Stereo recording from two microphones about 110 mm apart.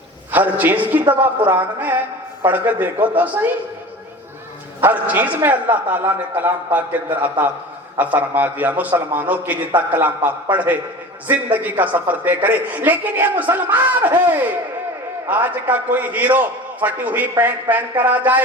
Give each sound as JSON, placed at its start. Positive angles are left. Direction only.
{"t": 0.3, "sound": "a man's voice", "side_deg": -15}
{"t": 4.8, "sound": "a man's voice", "side_deg": -15}